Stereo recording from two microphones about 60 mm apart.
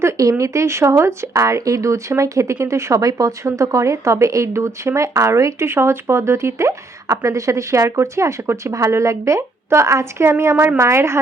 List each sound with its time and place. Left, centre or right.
0.2 s a woman's voice: right
5.6 s speech: right
10.8 s speech: right